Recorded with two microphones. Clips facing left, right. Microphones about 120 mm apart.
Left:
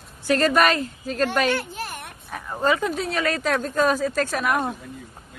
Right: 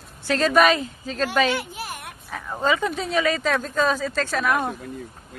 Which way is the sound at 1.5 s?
10° right (ahead or behind).